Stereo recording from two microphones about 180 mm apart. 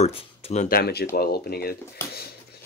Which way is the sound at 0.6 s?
60° left (ahead or behind).